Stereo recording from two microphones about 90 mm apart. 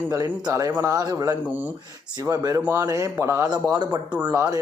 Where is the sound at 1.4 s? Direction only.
20° right (ahead or behind).